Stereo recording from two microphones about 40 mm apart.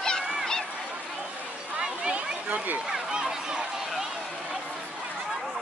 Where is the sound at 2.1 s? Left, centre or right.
Right.